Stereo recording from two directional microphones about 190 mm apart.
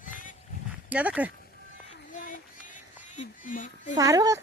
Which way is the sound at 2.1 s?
45° left (ahead or behind).